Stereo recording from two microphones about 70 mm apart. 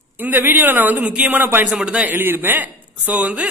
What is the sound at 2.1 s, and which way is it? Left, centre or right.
A man's voice, right.